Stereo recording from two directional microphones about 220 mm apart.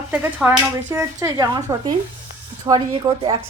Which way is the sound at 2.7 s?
20° right (ahead or behind).